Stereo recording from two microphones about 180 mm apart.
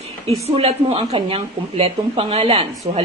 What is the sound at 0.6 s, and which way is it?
A woman's voice, 35° right (ahead or behind).